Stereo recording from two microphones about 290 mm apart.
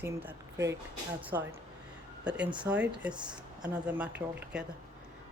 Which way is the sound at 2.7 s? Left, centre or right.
Centre.